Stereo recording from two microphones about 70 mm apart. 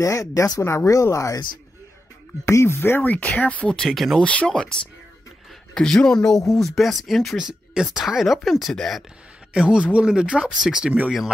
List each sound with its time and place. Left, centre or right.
0.0 s speech: left
2.4 s speech: left; by 3.8 s centre
3.8 s speech: centre
4.2 s speech: centre
5.8 s speech: centre
9.5 s speech: centre